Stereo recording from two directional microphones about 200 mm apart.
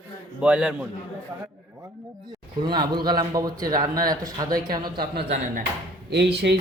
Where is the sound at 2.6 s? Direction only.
20° right (ahead or behind).